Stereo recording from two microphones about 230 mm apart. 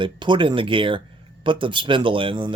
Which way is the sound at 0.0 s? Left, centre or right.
Right.